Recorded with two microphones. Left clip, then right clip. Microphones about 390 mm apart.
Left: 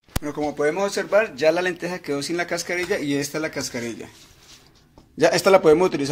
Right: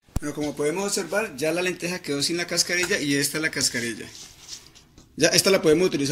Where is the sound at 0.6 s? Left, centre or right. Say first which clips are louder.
Left 4 dB; left.